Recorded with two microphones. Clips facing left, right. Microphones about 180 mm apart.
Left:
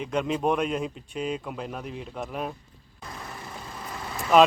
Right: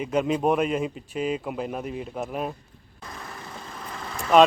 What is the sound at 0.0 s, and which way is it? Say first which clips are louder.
Speech: right 3 dB; 5° right (ahead or behind).